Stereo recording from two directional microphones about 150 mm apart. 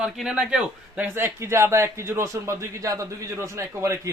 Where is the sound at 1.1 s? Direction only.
15° right (ahead or behind).